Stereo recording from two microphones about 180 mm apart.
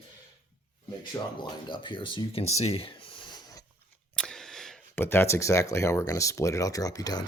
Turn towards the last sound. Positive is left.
turn(degrees=20)  # may be behind; listen again after turning